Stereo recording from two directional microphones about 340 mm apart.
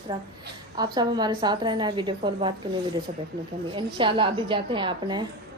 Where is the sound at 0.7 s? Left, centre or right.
Centre.